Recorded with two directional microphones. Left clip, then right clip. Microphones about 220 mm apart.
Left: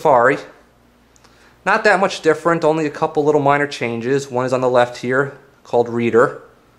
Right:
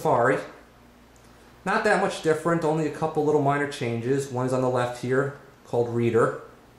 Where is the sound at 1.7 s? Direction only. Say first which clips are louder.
Left 8 dB; centre (ahead or behind).